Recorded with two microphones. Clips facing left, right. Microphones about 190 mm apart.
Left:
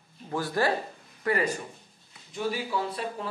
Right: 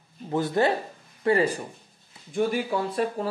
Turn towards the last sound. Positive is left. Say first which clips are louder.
# right 5 dB
turn(degrees=-50)  # may be behind; listen again after turning